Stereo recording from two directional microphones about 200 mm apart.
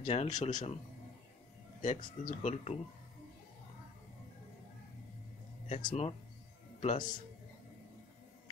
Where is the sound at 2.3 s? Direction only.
35° left (ahead or behind).